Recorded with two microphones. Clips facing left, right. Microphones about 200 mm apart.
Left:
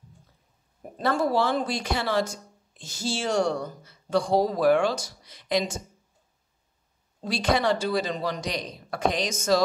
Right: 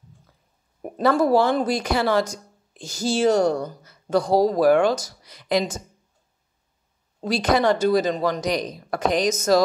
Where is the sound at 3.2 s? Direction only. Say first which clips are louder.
Right 7 dB; 40° right (ahead or behind).